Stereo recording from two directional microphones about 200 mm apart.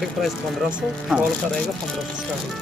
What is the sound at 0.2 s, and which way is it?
Speech, 5° right (ahead or behind).